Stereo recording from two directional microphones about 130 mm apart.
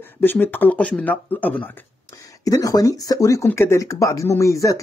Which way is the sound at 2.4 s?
25° left (ahead or behind).